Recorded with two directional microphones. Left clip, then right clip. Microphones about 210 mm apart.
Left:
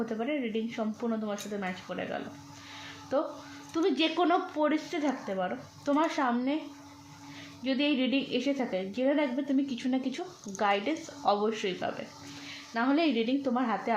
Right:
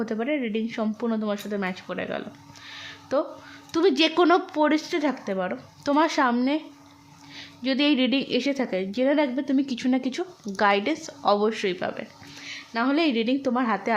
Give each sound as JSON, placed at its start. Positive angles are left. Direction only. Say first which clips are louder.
{"t": 0.0, "sound": "a woman's voice", "louder": "right 5 dB", "side_deg": -40}
{"t": 7.6, "sound": "a woman's voice", "louder": "right 6 dB", "side_deg": -45}